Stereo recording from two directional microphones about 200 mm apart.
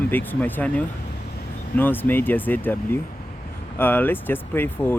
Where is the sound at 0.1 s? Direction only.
10° left (ahead or behind).